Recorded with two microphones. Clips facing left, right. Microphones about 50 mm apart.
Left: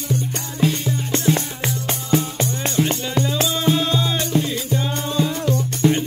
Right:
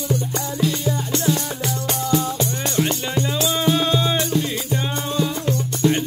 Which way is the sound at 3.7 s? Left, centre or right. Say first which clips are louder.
Right 1 dB; right.